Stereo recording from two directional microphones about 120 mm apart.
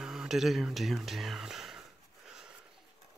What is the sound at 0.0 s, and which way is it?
Speech, 5° right (ahead or behind).